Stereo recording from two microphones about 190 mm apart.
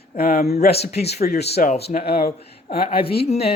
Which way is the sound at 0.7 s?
35° left (ahead or behind).